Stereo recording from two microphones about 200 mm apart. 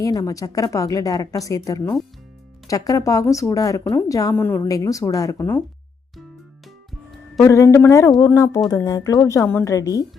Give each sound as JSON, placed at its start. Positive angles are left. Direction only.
{"t": 0.0, "sound": "speech", "side_deg": 15}
{"t": 7.3, "sound": "speech", "side_deg": 15}